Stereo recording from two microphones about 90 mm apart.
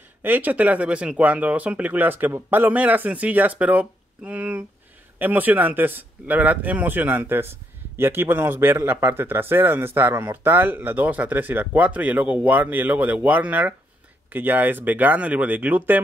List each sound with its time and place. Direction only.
0.2 s a man's voice: 20° right (ahead or behind)